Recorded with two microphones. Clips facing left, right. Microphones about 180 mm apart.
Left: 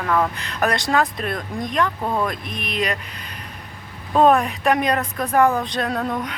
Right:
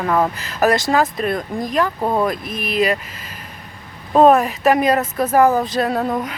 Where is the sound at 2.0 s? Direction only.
25° right (ahead or behind).